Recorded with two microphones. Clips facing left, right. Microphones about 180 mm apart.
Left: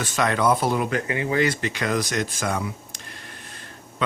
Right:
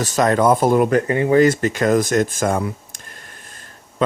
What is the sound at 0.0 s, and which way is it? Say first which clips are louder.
Speech: right 6 dB; 40° right (ahead or behind).